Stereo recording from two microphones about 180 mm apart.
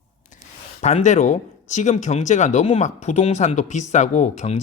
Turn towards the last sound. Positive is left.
turn(degrees=40)  # may be behind; listen again after turning